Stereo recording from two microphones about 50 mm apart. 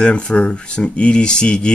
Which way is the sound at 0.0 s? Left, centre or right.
Centre.